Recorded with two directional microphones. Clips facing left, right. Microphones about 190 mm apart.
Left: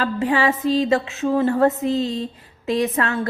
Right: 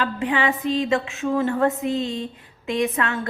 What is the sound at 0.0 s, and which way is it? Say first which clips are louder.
A woman's voice: left 3 dB; 40° left (ahead or behind).